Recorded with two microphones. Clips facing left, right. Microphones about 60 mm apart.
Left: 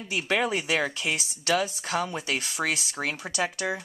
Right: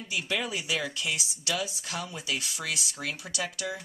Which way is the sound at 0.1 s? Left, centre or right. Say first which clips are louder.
Left 6 dB; left.